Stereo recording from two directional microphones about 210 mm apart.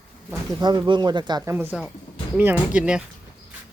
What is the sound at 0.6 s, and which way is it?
Speech, 20° right (ahead or behind).